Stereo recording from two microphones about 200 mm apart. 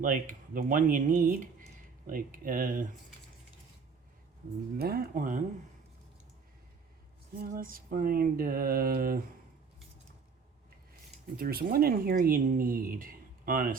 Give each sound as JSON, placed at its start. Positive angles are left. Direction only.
{"t": 0.0, "sound": "speech", "side_deg": -40}
{"t": 4.8, "sound": "speech", "side_deg": -50}
{"t": 7.3, "sound": "speech", "side_deg": -45}
{"t": 11.3, "sound": "speech", "side_deg": -50}